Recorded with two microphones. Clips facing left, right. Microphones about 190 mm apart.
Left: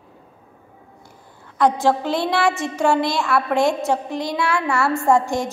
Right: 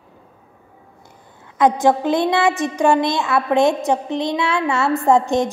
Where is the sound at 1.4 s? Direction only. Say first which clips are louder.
Right 2 dB; 20° right (ahead or behind).